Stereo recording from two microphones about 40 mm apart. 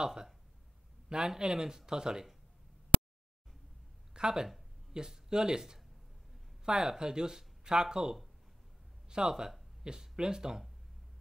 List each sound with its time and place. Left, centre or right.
0.0 s speech: centre
4.1 s speech: centre